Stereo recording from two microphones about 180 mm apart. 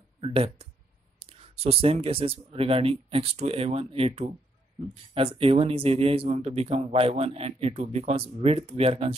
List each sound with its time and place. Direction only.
0.2 s speech: 30° right (ahead or behind)